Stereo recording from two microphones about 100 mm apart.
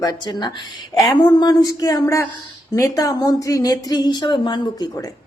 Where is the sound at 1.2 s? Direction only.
45° left (ahead or behind).